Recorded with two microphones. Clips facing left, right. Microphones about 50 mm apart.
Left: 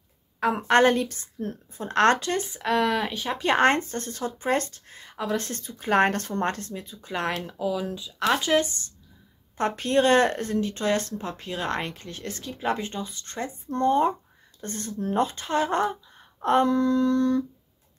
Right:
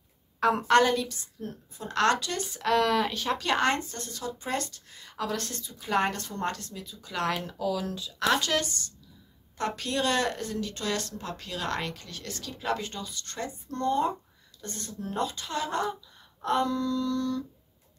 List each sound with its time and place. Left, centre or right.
0.4 s speech: left
2.5 s speech: centre
3.4 s speech: left
5.1 s a woman's voice: left
5.5 s speech: left
7.4 s speech: centre; by 17.5 s left